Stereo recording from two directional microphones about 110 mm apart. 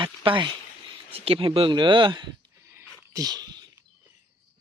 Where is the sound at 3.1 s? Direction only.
35° right (ahead or behind).